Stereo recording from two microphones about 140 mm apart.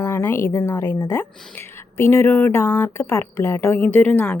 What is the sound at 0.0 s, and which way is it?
A woman's voice, 15° left (ahead or behind).